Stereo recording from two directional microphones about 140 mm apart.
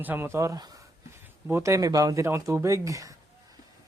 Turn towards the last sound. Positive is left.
turn(degrees=-20)  # may be behind; listen again after turning